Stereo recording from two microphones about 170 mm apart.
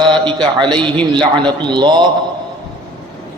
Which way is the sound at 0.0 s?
30° right (ahead or behind).